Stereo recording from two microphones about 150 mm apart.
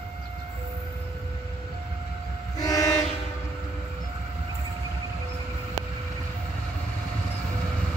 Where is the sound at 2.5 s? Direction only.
25° left (ahead or behind).